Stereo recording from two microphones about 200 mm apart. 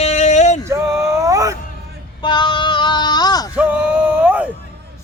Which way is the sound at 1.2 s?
15° right (ahead or behind).